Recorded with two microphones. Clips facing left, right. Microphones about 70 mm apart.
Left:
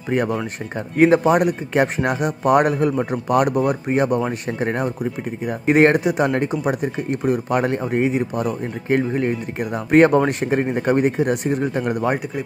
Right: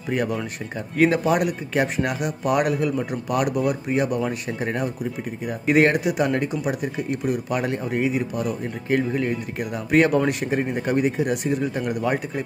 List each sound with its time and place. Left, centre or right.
0.9 s speech: left